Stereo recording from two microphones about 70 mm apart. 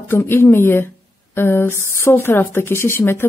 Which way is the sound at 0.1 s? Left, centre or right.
Left.